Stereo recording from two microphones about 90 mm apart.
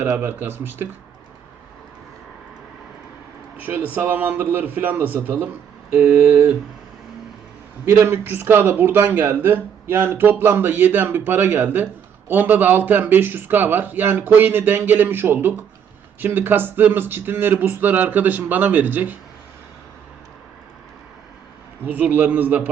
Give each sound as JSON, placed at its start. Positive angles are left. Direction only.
{"t": 0.0, "sound": "speech", "side_deg": -25}
{"t": 3.6, "sound": "speech", "side_deg": -25}
{"t": 7.9, "sound": "speech", "side_deg": -30}
{"t": 21.8, "sound": "speech", "side_deg": -20}